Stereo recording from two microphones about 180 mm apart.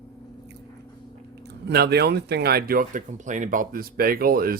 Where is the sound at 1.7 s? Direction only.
65° right (ahead or behind).